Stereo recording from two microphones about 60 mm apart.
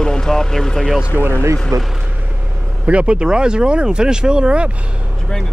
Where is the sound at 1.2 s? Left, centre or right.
Right.